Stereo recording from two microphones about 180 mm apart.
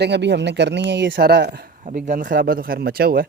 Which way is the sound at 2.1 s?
50° right (ahead or behind).